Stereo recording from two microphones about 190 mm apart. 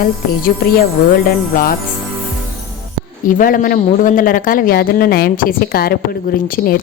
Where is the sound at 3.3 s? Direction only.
45° left (ahead or behind).